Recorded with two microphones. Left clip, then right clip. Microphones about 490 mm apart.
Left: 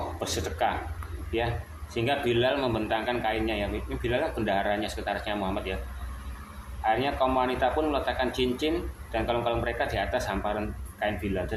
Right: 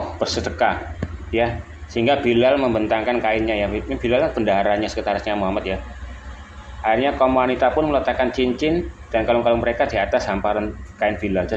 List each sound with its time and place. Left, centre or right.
0.2 s speech: left
2.0 s speech: left
6.8 s speech: left